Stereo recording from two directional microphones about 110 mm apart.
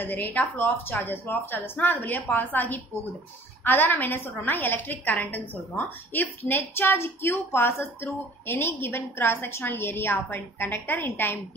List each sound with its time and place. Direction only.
0.0 s a woman's voice: 15° left (ahead or behind)